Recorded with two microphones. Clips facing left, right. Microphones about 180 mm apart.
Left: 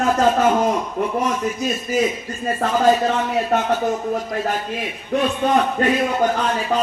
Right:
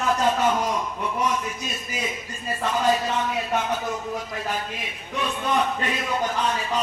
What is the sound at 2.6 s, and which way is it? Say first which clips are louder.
Speech: left 6 dB; 55° left (ahead or behind).